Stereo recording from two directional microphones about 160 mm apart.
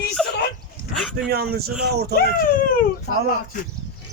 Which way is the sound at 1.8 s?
90° right.